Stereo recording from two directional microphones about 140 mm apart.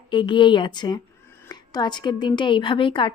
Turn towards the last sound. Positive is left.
turn(degrees=35)  # may be behind; listen again after turning